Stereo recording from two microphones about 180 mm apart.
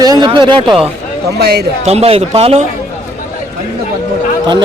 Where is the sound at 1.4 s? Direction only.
60° right (ahead or behind).